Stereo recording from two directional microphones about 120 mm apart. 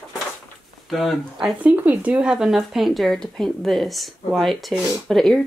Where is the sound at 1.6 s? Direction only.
10° right (ahead or behind); by 5.4 s 5° left (ahead or behind).